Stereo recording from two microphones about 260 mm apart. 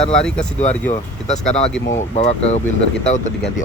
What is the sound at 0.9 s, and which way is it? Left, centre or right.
Speech, left.